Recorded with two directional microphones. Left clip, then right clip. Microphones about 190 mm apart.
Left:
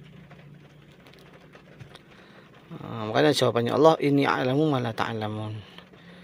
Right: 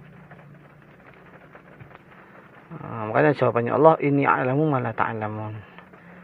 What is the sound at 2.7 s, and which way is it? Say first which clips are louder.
Speech: right 3 dB; 20° left (ahead or behind).